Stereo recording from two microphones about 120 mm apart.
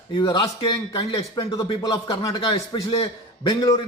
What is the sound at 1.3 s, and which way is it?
A man's voice, 35° left (ahead or behind).